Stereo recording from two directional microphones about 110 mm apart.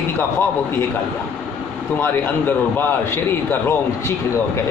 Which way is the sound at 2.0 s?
20° left (ahead or behind).